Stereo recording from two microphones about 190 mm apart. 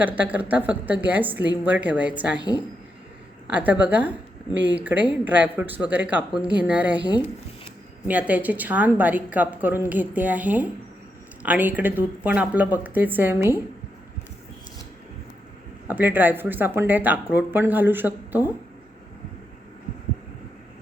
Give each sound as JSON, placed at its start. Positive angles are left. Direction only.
{"t": 0.0, "sound": "a woman's voice", "side_deg": -10}
{"t": 2.4, "sound": "speech", "side_deg": 20}
{"t": 3.5, "sound": "a woman's voice", "side_deg": -10}
{"t": 8.0, "sound": "a woman's voice", "side_deg": -10}
{"t": 15.9, "sound": "a woman's voice", "side_deg": -10}